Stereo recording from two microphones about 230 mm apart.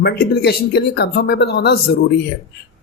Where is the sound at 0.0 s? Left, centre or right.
Left.